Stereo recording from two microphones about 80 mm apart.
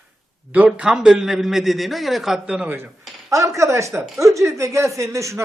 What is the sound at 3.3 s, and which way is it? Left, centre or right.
Speech, right.